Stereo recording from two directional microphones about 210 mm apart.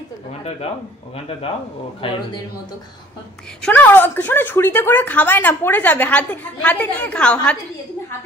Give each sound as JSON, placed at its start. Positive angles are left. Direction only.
{"t": 0.3, "sound": "speech", "side_deg": 30}
{"t": 2.0, "sound": "a man's voice", "side_deg": 25}
{"t": 3.6, "sound": "speech", "side_deg": 10}